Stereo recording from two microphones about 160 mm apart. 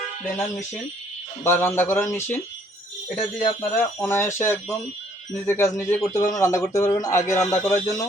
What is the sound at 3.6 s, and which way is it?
Speech, 15° left (ahead or behind).